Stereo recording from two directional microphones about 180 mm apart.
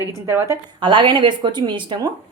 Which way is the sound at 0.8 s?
25° right (ahead or behind).